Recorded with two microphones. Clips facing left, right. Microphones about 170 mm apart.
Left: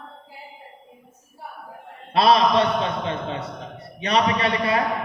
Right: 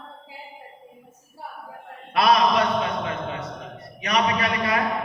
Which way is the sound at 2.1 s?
30° left (ahead or behind).